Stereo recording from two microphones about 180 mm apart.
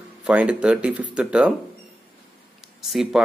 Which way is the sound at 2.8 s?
Centre (ahead or behind).